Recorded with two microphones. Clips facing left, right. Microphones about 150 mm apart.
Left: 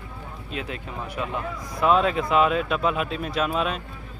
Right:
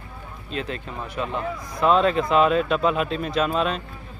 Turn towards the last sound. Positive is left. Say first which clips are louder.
# right 2 dB
turn(degrees=5)  # may be behind; listen again after turning